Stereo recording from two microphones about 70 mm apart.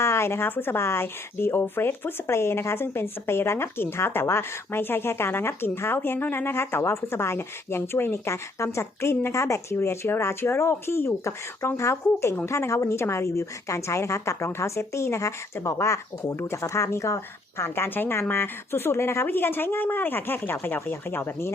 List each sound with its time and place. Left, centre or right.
0.0 s a woman's voice: left
16.2 s a woman's voice: left
17.6 s speech: left